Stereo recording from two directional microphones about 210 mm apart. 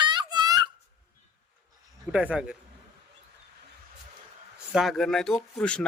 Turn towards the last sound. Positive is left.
turn(degrees=5)  # may be behind; listen again after turning